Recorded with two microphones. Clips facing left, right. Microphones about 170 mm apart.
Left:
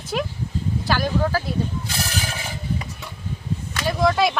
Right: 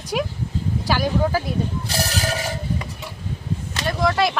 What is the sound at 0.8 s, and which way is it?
Speech, 10° right (ahead or behind).